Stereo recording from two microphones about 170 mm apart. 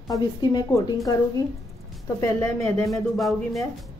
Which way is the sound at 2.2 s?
15° left (ahead or behind).